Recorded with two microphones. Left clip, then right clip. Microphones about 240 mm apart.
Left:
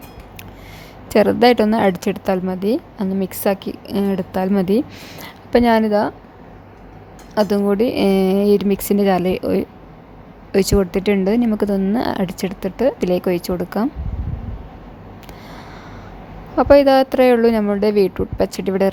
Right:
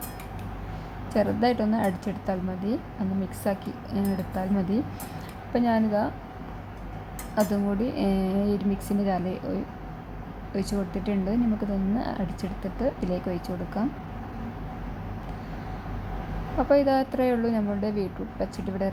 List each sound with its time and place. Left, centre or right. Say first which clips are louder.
1.1 s a woman's voice: left 12 dB; left
7.3 s a woman's voice: left 10 dB; left
16.6 s a woman's voice: left 11 dB; left